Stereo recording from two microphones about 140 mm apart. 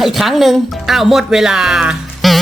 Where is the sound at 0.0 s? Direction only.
Centre (ahead or behind).